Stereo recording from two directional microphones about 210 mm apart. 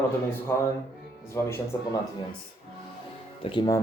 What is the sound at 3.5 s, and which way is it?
Speech, 20° left (ahead or behind).